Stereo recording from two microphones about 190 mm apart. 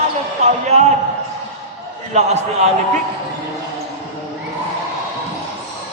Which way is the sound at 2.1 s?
35° right (ahead or behind).